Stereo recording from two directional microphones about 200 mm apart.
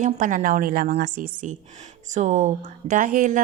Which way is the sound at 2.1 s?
40° right (ahead or behind).